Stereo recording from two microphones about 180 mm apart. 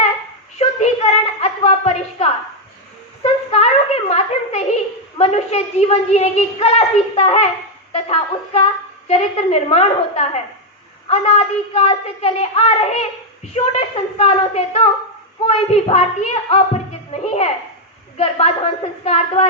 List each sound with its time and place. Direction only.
0.6 s a woman's voice: 35° left (ahead or behind)
3.5 s a sound: 35° left (ahead or behind)
5.1 s a woman's voice: 35° left (ahead or behind)